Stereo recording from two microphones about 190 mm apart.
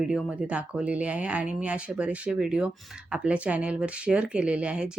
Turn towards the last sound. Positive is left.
turn(degrees=-5)  # may be behind; listen again after turning